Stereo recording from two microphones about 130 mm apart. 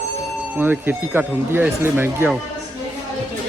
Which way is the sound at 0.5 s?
15° right (ahead or behind).